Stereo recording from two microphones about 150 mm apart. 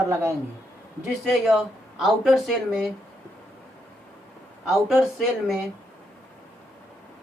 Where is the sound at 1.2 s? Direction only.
Centre (ahead or behind).